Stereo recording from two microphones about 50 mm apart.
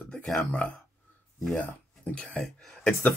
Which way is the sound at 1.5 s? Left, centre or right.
Left.